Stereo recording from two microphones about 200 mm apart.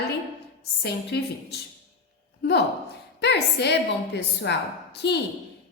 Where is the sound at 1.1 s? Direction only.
55° left (ahead or behind).